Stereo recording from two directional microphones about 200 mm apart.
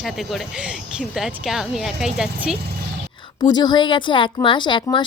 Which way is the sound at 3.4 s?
20° left (ahead or behind).